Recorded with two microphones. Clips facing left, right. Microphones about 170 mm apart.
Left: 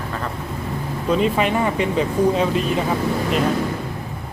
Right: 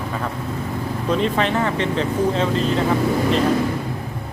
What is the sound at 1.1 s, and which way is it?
Speech, 10° left (ahead or behind).